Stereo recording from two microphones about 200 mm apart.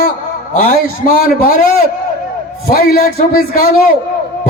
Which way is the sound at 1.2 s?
45° left (ahead or behind).